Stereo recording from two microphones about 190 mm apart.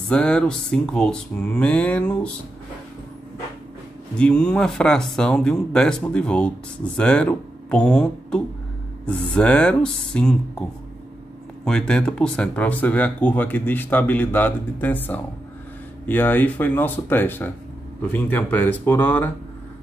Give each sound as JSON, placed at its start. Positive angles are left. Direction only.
{"t": 0.1, "sound": "speech", "side_deg": 5}
{"t": 4.2, "sound": "speech", "side_deg": 5}
{"t": 11.6, "sound": "speech", "side_deg": 5}